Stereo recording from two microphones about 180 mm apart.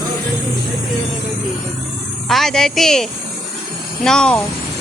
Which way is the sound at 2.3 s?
Centre (ahead or behind).